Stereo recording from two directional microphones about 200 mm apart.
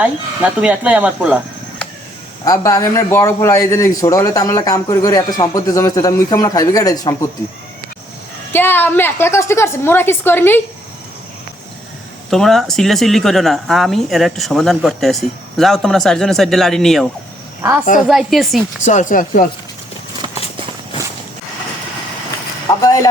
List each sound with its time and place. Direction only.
0.0 s speech: 5° right (ahead or behind)
2.4 s a man's voice: 15° left (ahead or behind)
8.5 s a man's voice: 10° left (ahead or behind)
12.3 s speech: centre (ahead or behind)
17.6 s a woman's voice: 10° right (ahead or behind)
18.9 s speech: 40° left (ahead or behind)
22.8 s speech: 15° left (ahead or behind)